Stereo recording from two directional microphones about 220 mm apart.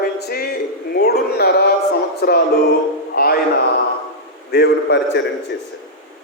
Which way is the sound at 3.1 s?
45° left (ahead or behind).